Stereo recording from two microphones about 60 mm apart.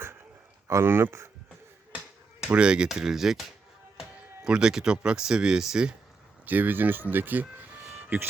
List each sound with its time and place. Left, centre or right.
0.7 s speech: right
2.6 s speech: centre
4.4 s speech: centre
6.4 s speech: right
7.9 s music: right